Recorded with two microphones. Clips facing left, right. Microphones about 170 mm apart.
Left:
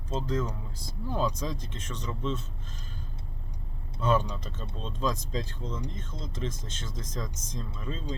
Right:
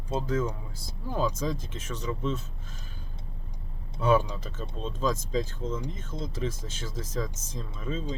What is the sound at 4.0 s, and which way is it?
Speech, 10° right (ahead or behind).